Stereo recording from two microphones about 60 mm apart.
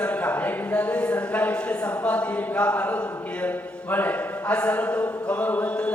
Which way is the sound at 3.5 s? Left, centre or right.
Left.